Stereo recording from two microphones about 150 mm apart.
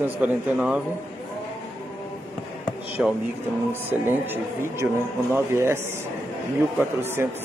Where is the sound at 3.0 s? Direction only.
15° right (ahead or behind).